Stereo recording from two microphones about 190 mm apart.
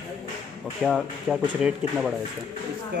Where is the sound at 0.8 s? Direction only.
Centre (ahead or behind).